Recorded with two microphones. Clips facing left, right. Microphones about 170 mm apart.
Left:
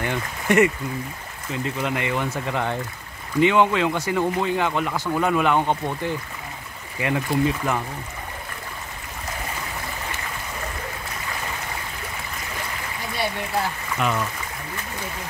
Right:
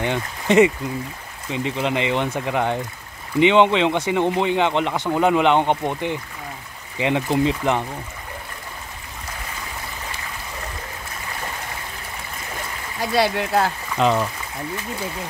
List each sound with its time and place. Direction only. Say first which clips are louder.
0.0 s speech: right 3 dB; 20° right (ahead or behind)
13.1 s speech: right 7 dB; 90° right
13.9 s speech: right 6 dB; 30° right (ahead or behind)